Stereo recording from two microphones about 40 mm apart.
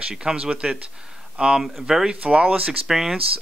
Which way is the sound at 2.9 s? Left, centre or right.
Centre.